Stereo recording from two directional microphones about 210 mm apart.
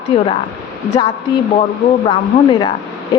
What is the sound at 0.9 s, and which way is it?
A woman's voice, 25° left (ahead or behind).